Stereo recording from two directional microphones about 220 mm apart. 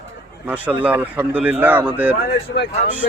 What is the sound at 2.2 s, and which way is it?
Speech, 50° left (ahead or behind).